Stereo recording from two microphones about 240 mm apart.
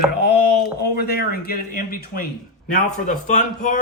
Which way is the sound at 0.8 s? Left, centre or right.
Left.